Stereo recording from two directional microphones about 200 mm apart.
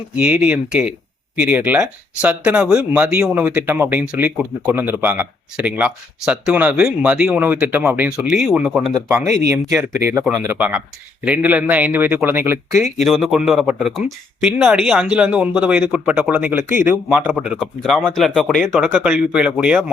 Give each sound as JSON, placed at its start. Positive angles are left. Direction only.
{"t": 0.2, "sound": "speech", "side_deg": -5}
{"t": 8.9, "sound": "speech", "side_deg": -15}
{"t": 13.0, "sound": "speech", "side_deg": 0}